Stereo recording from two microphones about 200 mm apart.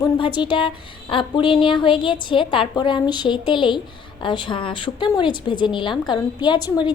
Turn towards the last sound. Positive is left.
turn(degrees=20)  # may be behind; listen again after turning